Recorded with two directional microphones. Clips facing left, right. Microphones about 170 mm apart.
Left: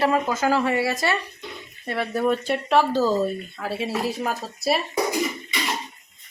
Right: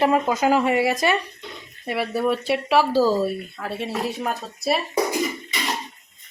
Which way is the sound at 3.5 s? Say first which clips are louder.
Left 1 dB; centre (ahead or behind).